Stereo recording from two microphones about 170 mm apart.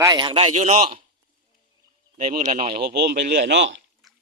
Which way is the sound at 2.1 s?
50° right (ahead or behind).